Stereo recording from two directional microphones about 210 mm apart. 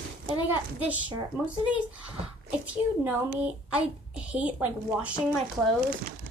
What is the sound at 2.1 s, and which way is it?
Speech, 25° right (ahead or behind).